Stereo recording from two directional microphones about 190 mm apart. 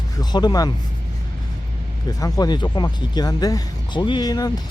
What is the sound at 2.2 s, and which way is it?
Speech, 20° left (ahead or behind).